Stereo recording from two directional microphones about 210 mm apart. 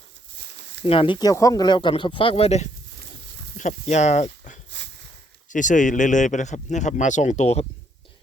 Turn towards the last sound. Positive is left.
turn(degrees=30)  # may be behind; listen again after turning